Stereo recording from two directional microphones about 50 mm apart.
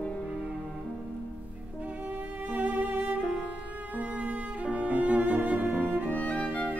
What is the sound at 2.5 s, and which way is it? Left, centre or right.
Music, right.